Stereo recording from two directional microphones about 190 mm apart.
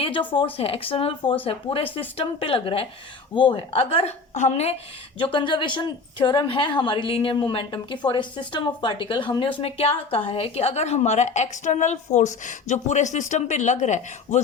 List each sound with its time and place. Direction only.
0.0 s a woman's voice: 25° left (ahead or behind)